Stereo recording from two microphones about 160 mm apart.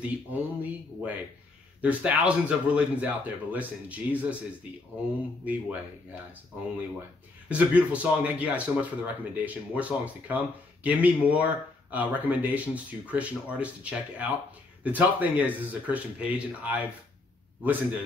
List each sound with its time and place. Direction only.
0.0 s speech: 10° right (ahead or behind)
5.4 s speech: 10° right (ahead or behind)
7.4 s speech: 10° right (ahead or behind)